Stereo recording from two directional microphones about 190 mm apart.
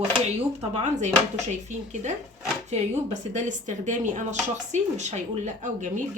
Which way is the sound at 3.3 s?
40° right (ahead or behind).